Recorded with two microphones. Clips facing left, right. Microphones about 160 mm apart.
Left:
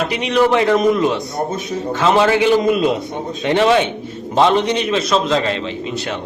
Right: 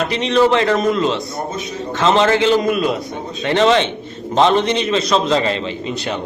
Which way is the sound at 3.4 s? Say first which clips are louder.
Even; 10° left (ahead or behind).